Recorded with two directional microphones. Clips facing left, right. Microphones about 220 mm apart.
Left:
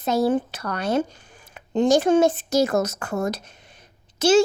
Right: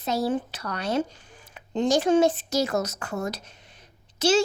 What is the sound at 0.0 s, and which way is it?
Speech, 50° left (ahead or behind).